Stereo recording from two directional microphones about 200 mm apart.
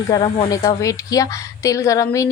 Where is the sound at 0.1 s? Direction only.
20° left (ahead or behind).